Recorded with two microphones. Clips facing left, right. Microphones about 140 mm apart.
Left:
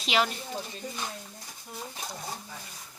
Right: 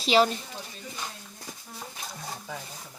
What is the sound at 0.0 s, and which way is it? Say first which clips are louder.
Speech: right 6 dB; 35° right (ahead or behind).